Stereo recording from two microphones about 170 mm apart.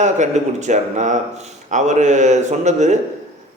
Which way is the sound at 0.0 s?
45° right (ahead or behind).